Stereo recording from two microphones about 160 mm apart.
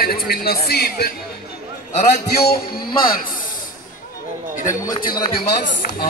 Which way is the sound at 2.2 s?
80° left.